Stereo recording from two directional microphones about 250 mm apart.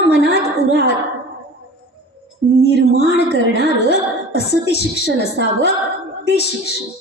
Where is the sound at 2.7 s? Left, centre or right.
Left.